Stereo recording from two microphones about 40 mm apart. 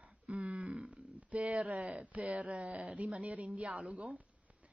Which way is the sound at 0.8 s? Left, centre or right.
Right.